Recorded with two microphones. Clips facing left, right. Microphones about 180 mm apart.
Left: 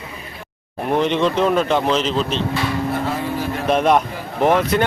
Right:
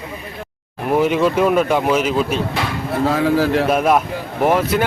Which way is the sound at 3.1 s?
90° right.